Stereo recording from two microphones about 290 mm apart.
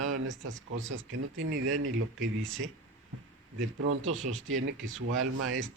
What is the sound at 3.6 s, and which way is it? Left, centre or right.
Speech, right.